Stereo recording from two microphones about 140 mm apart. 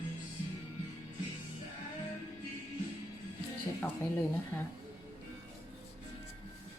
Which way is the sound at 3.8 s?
15° left (ahead or behind).